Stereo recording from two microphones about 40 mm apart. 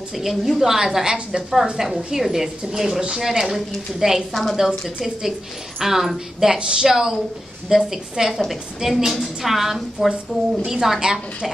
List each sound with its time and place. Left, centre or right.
0.2 s speech: centre
1.0 s a woman's voice: centre
1.5 s speech: centre
4.3 s a woman's voice: centre
4.6 s a woman's voice: centre